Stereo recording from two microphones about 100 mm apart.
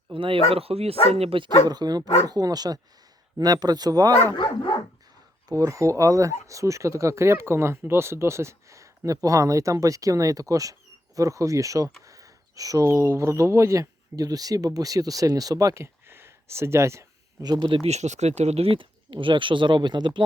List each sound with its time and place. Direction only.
0.1 s speech: 60° right (ahead or behind)
0.5 s speech: 80° right
1.5 s speech: 45° right (ahead or behind)
5.5 s speech: 35° right (ahead or behind)
17.4 s speech: 45° right (ahead or behind)
17.8 s speech: 90° right; by 20.2 s 55° right (ahead or behind)